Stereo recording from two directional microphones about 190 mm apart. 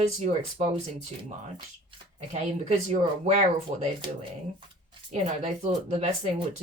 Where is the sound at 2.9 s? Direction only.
40° right (ahead or behind).